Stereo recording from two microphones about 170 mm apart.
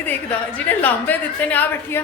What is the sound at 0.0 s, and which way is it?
A woman's voice, 10° left (ahead or behind).